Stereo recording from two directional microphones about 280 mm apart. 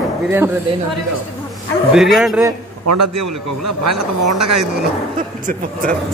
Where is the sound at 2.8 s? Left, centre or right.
Right.